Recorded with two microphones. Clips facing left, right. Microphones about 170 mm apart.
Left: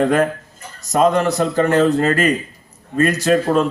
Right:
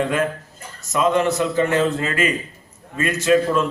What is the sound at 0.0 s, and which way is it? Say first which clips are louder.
A man's voice: left 5 dB; 45° left (ahead or behind).